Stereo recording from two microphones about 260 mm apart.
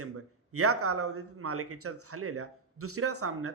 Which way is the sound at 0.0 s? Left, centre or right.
Right.